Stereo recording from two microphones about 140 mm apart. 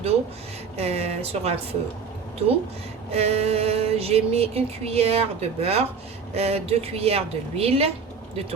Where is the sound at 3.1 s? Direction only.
45° right (ahead or behind).